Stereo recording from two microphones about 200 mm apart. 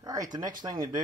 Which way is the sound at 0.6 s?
20° right (ahead or behind).